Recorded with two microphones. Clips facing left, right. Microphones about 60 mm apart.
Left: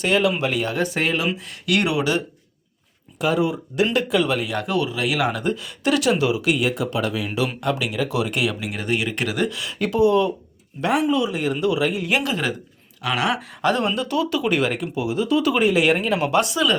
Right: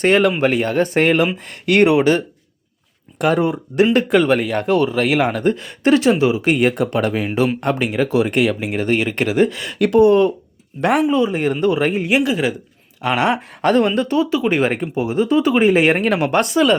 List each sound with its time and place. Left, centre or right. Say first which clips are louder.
0.0 s speech: right 5 dB; right
1.5 s speech: right 10 dB; right
3.2 s speech: right 4 dB; right
9.7 s speech: right 6 dB; right
11.0 s speech: right 4 dB; right
12.0 s speech: right 5 dB; centre
13.0 s speech: right 5 dB; right
13.6 s speech: right 6 dB; right